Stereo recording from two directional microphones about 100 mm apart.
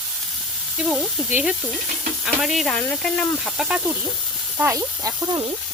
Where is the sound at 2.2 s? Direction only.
Centre (ahead or behind).